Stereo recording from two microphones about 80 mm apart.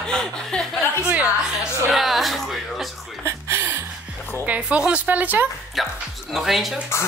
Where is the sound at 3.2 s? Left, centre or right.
Right.